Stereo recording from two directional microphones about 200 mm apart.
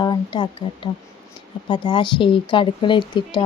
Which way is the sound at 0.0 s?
20° left (ahead or behind).